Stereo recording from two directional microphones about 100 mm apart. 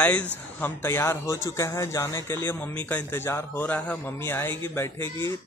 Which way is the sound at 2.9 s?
20° left (ahead or behind).